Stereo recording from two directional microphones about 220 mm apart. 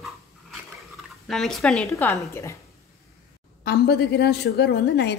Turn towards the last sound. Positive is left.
turn(degrees=50)  # may be behind; listen again after turning